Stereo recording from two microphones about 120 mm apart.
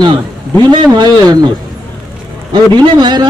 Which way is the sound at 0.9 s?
35° right (ahead or behind).